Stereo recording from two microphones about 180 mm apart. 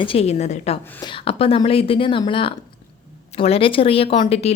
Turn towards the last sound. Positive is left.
turn(degrees=35)  # may be behind; listen again after turning